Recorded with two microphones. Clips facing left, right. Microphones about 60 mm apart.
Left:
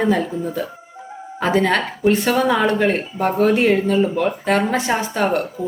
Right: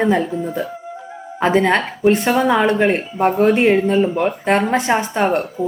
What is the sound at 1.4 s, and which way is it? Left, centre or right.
A woman's voice, right.